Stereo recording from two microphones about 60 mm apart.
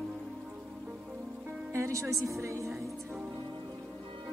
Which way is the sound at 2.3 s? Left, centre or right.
Right.